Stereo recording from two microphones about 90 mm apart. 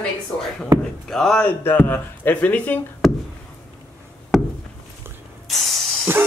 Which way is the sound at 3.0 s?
Centre (ahead or behind).